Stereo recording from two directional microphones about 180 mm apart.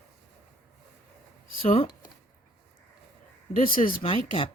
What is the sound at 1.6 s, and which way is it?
Speech, 30° left (ahead or behind).